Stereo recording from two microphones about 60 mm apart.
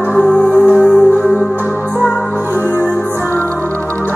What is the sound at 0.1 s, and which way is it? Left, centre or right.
Music, centre.